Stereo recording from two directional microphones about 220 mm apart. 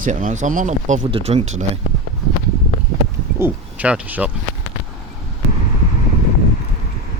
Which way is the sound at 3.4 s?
5° right (ahead or behind).